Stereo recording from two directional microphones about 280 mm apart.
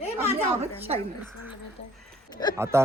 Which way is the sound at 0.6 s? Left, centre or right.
Right.